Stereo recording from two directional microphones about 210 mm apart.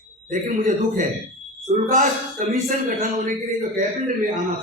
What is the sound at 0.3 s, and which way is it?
A man's voice, 35° right (ahead or behind).